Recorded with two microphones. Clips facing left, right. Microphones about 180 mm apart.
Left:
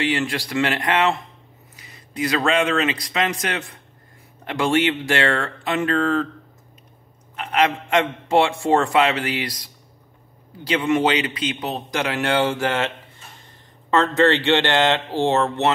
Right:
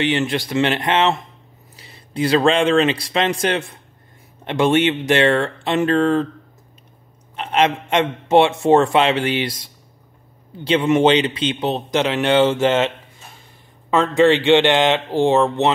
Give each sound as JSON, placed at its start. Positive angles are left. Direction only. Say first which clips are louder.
{"t": 0.0, "sound": "a man's voice", "louder": "right 3 dB", "side_deg": -25}
{"t": 7.3, "sound": "a man's voice", "louder": "right 2 dB", "side_deg": -25}